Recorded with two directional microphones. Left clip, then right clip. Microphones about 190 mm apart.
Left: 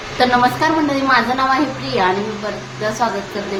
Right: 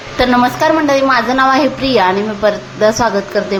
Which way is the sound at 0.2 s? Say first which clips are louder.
Right 2 dB; 35° right (ahead or behind).